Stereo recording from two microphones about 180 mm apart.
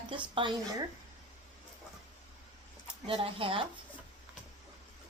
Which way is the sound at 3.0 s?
30° right (ahead or behind).